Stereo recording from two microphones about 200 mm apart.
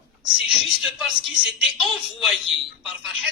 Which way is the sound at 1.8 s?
Centre (ahead or behind).